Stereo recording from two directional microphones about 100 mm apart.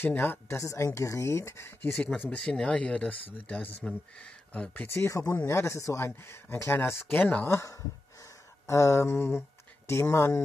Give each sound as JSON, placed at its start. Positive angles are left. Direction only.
{"t": 0.0, "sound": "speech", "side_deg": 20}
{"t": 0.6, "sound": "speech", "side_deg": 30}
{"t": 2.2, "sound": "speech", "side_deg": 10}
{"t": 4.8, "sound": "speech", "side_deg": 25}